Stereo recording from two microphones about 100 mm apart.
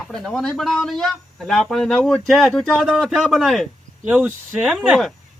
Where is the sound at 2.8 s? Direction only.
10° right (ahead or behind).